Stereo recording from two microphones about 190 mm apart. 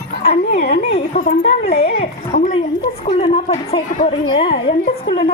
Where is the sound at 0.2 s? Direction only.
35° left (ahead or behind).